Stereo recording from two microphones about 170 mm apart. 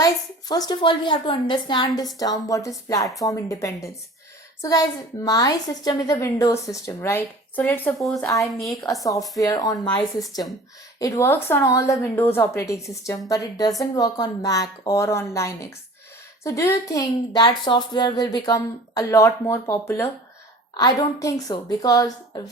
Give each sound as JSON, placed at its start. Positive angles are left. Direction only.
{"t": 0.0, "sound": "a woman's voice", "side_deg": 20}
{"t": 9.4, "sound": "a woman's voice", "side_deg": 20}